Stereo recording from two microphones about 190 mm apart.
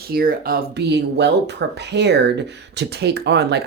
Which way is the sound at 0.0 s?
55° right (ahead or behind).